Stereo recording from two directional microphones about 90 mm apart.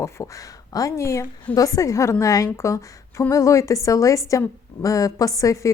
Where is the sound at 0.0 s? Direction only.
35° left (ahead or behind).